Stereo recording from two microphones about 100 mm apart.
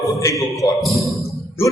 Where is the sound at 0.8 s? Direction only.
Centre (ahead or behind).